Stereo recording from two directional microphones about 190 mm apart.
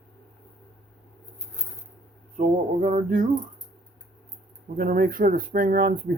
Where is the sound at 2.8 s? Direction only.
40° right (ahead or behind).